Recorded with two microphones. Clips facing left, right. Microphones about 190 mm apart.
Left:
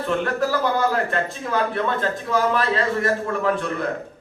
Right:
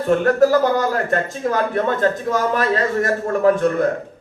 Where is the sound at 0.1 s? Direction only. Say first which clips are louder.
Right 9 dB; 45° right (ahead or behind).